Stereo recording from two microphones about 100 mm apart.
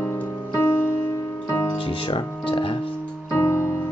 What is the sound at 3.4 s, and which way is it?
Music, 30° left (ahead or behind).